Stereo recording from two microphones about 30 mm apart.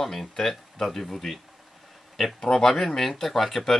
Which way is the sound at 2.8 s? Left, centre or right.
Centre.